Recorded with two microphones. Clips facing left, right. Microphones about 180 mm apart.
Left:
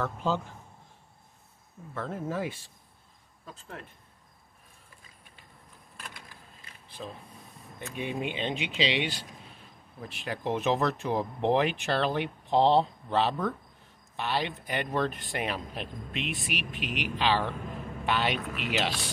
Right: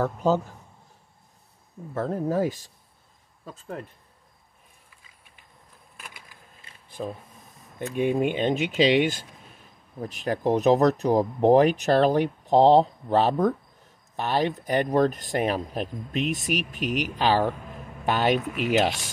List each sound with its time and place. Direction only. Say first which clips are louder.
0.0 s speech: right 7 dB; 40° right (ahead or behind)
2.0 s speech: right 8 dB; 40° right (ahead or behind)
5.9 s vehicle: even; 10° right (ahead or behind)
7.0 s speech: right 8 dB; 50° right (ahead or behind)